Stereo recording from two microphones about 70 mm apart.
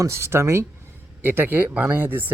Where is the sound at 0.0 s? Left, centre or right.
Right.